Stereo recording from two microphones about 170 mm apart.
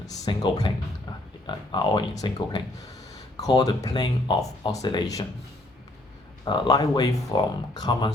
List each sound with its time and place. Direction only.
0.0 s speech: 25° left (ahead or behind)
6.4 s speech: 25° left (ahead or behind)